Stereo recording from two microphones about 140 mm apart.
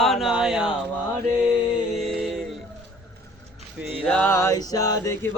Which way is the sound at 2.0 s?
Centre (ahead or behind).